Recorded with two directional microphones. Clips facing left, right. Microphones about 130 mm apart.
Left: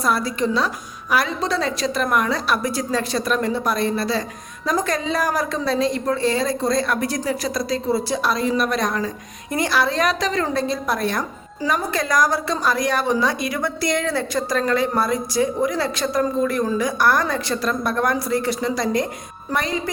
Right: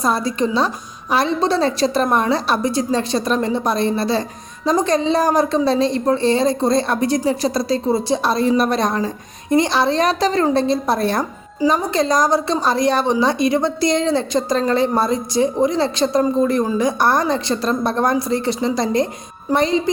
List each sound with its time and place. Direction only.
0.0 s a woman's voice: 20° right (ahead or behind)